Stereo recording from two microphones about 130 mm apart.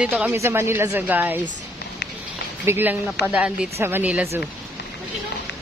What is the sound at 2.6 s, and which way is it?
Speech, 15° right (ahead or behind).